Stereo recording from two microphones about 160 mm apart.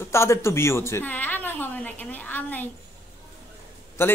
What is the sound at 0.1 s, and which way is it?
A woman's voice, 15° left (ahead or behind).